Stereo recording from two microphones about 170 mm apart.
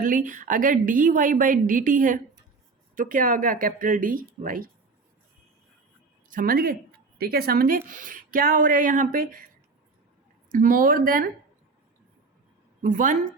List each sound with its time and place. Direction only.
0.0 s a woman's voice: 50° right (ahead or behind)
6.2 s a woman's voice: 55° right (ahead or behind)
10.5 s speech: 55° right (ahead or behind)
12.8 s a woman's voice: 50° right (ahead or behind)